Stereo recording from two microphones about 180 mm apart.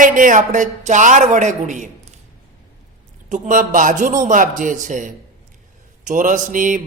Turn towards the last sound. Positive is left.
turn(degrees=-45)  # may be behind; listen again after turning